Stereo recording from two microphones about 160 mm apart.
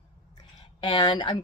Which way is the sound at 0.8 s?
30° left (ahead or behind).